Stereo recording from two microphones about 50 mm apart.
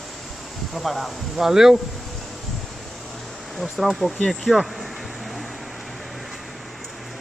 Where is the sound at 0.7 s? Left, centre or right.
Centre.